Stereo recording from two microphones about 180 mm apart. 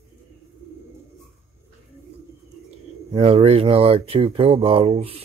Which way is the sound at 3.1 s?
30° right (ahead or behind).